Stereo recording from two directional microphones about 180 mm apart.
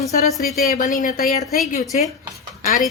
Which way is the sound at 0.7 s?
45° left (ahead or behind).